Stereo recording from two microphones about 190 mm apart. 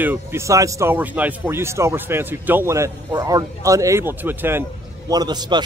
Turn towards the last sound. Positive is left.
turn(degrees=-20)  # may be behind; listen again after turning